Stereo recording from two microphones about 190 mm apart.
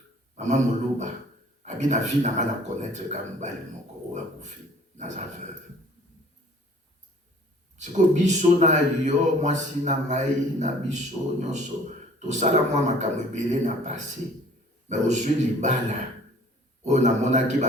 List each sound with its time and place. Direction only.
0.3 s speech: 40° right (ahead or behind)
7.8 s speech: 40° right (ahead or behind)